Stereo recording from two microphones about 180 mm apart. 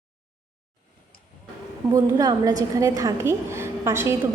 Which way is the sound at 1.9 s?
20° right (ahead or behind).